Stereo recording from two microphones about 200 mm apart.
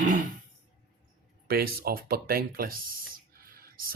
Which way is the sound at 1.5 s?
50° right (ahead or behind).